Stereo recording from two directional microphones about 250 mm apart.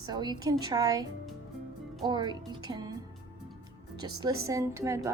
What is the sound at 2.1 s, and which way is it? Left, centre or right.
Speech, centre.